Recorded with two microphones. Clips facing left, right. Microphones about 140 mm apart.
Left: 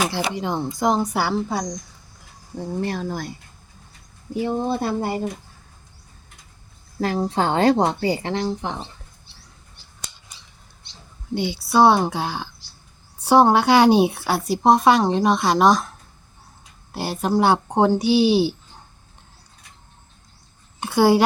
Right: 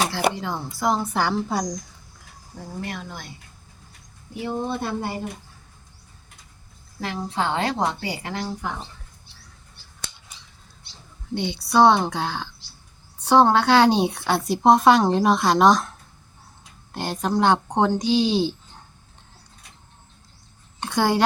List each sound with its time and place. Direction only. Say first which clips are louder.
0.3 s speech: left 5 dB; 20° left (ahead or behind)
1.4 s a woman's voice: even; centre (ahead or behind)
2.6 s speech: left 7 dB; 35° left (ahead or behind)
4.8 s speech: left 4 dB; 30° left (ahead or behind)
7.0 s speech: left 5 dB; 40° left (ahead or behind)
11.3 s a woman's voice: left 1 dB; 5° left (ahead or behind)
20.8 s a woman's voice: left 4 dB; 10° left (ahead or behind)